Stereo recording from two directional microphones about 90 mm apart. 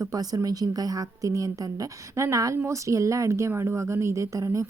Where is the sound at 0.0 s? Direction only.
40° right (ahead or behind).